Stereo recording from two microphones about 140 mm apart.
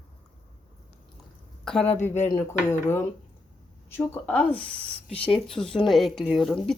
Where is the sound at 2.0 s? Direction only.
60° left (ahead or behind).